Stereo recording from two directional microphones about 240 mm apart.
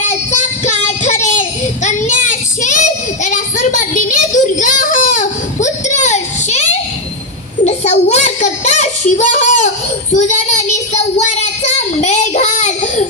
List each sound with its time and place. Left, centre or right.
0.0 s child singing: left